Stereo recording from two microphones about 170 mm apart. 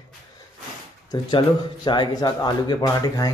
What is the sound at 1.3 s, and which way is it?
Speech, 25° left (ahead or behind).